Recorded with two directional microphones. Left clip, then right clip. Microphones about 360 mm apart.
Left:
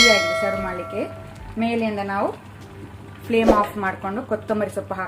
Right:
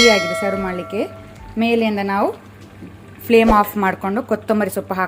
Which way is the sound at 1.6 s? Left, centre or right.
Right.